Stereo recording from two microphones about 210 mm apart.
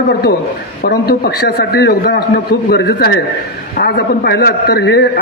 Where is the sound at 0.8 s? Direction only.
45° left (ahead or behind).